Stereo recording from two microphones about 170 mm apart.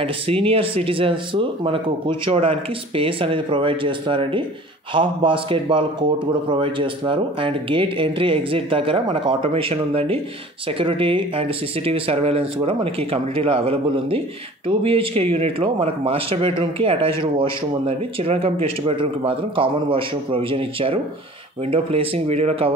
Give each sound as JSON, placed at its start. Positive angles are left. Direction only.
{"t": 0.0, "sound": "speech", "side_deg": -35}